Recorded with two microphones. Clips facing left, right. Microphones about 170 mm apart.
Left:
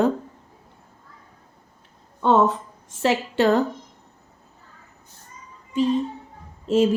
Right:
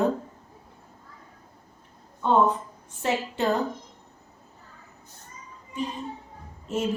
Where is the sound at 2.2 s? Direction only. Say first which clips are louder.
Left 3 dB; 90° left.